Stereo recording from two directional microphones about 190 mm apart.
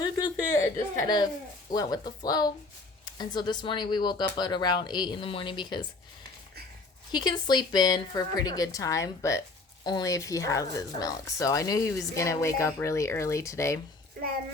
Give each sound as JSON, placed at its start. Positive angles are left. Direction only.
{"t": 0.0, "sound": "a sound", "side_deg": 20}
{"t": 1.0, "sound": "speech", "side_deg": 20}
{"t": 7.1, "sound": "speech", "side_deg": 25}